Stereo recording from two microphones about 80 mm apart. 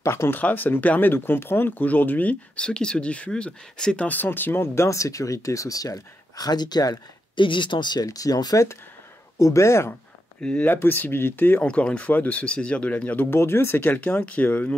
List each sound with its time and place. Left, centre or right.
0.0 s speech: left
0.4 s speech: left
7.3 s speech: left
8.0 s speech: left
9.4 s speech: left
10.4 s speech: centre
11.6 s speech: centre